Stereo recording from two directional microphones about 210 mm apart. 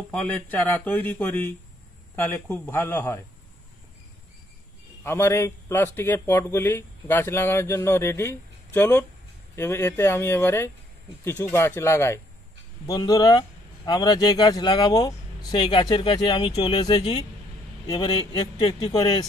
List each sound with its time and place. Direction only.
0.1 s a man's voice: 5° left (ahead or behind)
5.0 s a man's voice: 15° left (ahead or behind)